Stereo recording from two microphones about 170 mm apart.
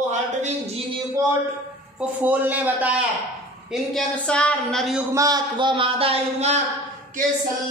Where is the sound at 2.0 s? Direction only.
10° right (ahead or behind).